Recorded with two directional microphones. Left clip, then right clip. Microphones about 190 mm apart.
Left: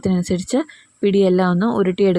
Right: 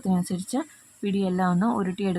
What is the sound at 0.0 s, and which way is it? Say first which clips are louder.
Speech: left 8 dB; 25° left (ahead or behind).